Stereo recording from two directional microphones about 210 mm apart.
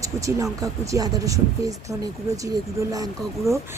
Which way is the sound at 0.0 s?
15° right (ahead or behind).